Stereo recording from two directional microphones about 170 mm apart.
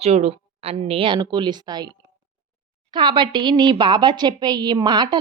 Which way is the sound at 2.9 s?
25° right (ahead or behind).